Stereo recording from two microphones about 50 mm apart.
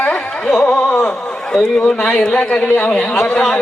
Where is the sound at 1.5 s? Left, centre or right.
Centre.